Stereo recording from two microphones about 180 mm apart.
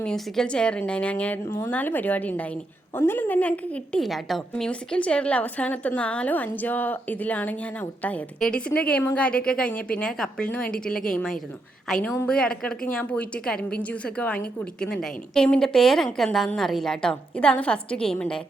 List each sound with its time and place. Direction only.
0.0 s a woman's voice: 5° left (ahead or behind)